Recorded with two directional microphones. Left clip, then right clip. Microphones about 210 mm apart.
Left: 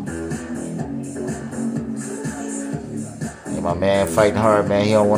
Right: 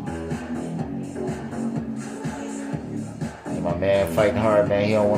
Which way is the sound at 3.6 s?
20° left (ahead or behind).